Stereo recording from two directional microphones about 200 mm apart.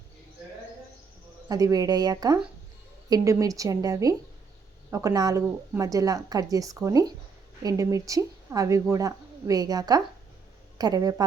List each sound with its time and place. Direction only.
1.5 s a woman's voice: 15° right (ahead or behind)